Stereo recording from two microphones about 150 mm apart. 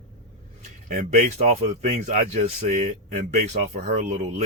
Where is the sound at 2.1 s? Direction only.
50° right (ahead or behind).